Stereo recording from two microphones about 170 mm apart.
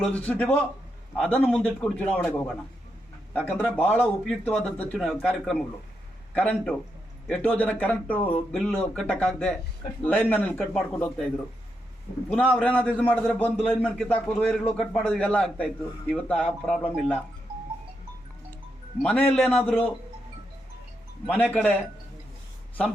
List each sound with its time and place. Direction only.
0.0 s speech: 10° left (ahead or behind)
1.5 s a man's voice: 5° right (ahead or behind)
2.0 s a man's voice: 10° left (ahead or behind)
12.3 s a man's voice: 10° left (ahead or behind)
19.0 s speech: 10° left (ahead or behind)
21.2 s speech: 10° left (ahead or behind)